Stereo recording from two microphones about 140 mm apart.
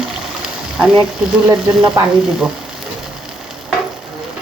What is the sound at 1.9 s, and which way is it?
Speech, 5° right (ahead or behind).